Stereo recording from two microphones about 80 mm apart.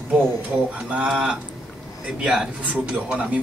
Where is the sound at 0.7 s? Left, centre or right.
Centre.